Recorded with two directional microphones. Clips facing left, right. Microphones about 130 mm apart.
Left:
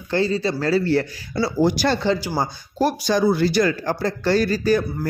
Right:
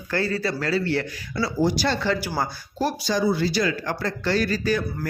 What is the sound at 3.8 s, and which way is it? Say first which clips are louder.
A man's voice: left 4 dB; 35° left (ahead or behind).